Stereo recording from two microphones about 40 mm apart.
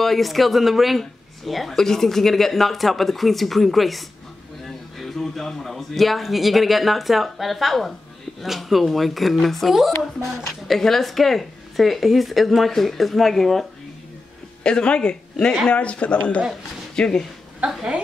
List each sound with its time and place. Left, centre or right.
0.0 s speech: centre
1.8 s speech: centre
14.6 s speech: left
16.9 s speech: centre